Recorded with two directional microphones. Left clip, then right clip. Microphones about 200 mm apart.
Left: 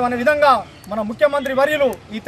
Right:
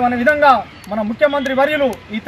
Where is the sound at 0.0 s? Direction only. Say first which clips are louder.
Right 2 dB; 25° left (ahead or behind).